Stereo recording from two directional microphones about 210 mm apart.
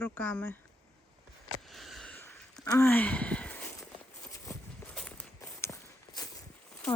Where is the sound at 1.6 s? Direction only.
Centre (ahead or behind).